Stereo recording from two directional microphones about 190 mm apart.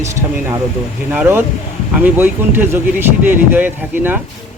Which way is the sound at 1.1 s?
10° right (ahead or behind).